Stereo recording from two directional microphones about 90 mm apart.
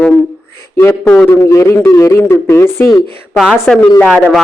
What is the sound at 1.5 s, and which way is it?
Speech, 35° left (ahead or behind).